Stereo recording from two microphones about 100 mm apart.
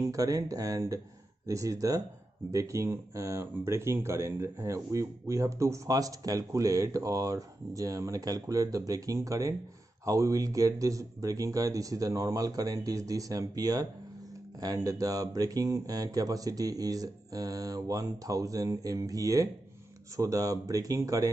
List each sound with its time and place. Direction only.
0.0 s speech: 35° right (ahead or behind)